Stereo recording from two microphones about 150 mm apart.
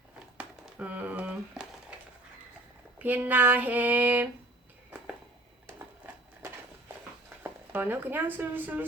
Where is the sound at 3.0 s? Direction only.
10° right (ahead or behind).